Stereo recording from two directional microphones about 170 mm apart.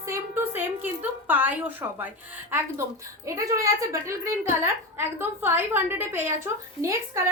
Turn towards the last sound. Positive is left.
turn(degrees=-15)  # may be behind; listen again after turning